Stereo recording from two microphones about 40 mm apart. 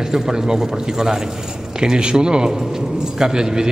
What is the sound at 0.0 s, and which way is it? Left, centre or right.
A man's voice, centre.